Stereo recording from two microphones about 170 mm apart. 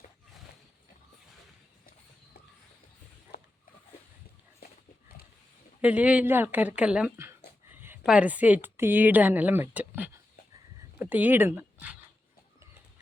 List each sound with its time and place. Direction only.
3.3 s a sound: 75° left (ahead or behind)
4.6 s dog: 60° left (ahead or behind)
5.8 s speech: 10° right (ahead or behind)